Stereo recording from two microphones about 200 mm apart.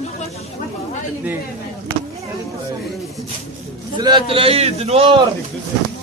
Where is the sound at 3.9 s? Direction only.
20° right (ahead or behind).